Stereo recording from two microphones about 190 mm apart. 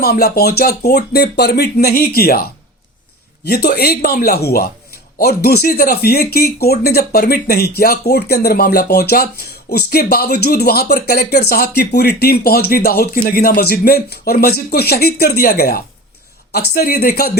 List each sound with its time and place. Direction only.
0.0 s speech: 55° left (ahead or behind)
3.4 s speech: 55° left (ahead or behind)